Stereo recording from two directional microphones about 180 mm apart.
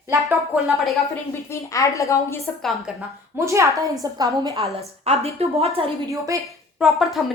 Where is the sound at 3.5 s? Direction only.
15° right (ahead or behind).